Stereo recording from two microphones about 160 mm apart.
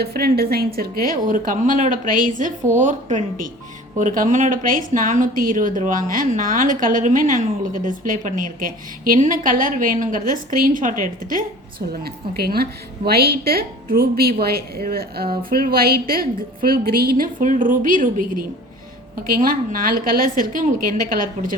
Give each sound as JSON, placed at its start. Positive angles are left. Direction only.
{"t": 0.0, "sound": "a woman's voice", "side_deg": -75}
{"t": 12.0, "sound": "a woman's voice", "side_deg": -75}